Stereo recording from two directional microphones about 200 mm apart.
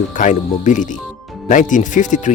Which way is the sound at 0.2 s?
40° left (ahead or behind).